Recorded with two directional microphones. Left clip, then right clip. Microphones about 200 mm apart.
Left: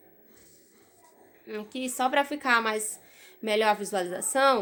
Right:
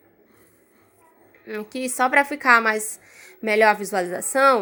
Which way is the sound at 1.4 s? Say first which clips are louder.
Right 6 dB; 25° right (ahead or behind).